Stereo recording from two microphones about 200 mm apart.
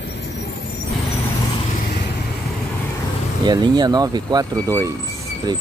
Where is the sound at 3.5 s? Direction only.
20° right (ahead or behind).